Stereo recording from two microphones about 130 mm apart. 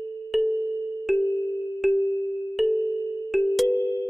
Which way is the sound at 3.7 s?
15° left (ahead or behind).